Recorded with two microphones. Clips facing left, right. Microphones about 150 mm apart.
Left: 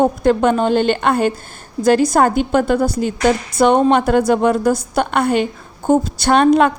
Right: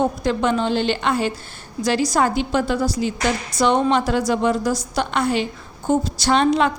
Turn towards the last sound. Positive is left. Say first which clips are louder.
# left 5 dB
turn(degrees=55)  # may be behind; listen again after turning